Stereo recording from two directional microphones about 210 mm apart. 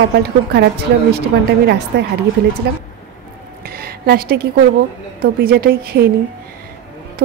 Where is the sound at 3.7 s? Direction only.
45° right (ahead or behind).